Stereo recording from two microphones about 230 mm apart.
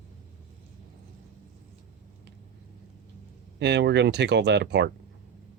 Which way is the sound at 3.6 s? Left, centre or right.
Right.